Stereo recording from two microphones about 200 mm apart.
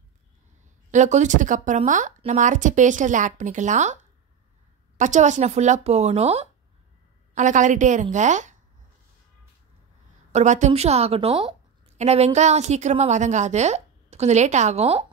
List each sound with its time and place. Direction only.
0.9 s a woman's voice: 35° right (ahead or behind)
10.3 s a woman's voice: 35° right (ahead or behind)